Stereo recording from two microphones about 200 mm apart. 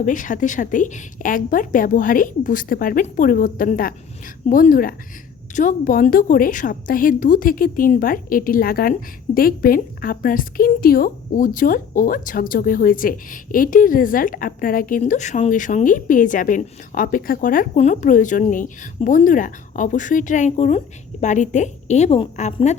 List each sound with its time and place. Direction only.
0.0 s a woman's voice: 40° left (ahead or behind)